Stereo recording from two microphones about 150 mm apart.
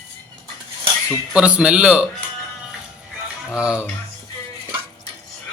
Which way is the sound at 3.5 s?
5° right (ahead or behind).